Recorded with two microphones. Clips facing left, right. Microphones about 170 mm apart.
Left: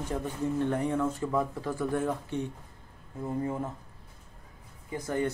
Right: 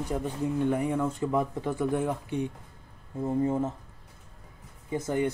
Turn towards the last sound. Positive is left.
turn(degrees=-20)  # may be behind; listen again after turning